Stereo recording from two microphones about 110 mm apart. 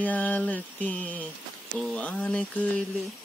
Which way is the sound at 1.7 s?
5° left (ahead or behind).